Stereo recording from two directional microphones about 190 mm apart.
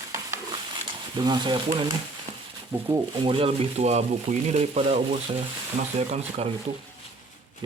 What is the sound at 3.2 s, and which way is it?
Speech, 30° right (ahead or behind).